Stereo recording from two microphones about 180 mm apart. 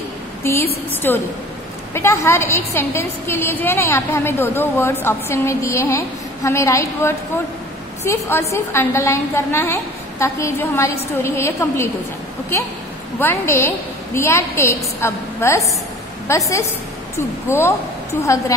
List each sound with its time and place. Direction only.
0.4 s a woman's voice: 15° left (ahead or behind)
13.2 s a woman's voice: 15° left (ahead or behind)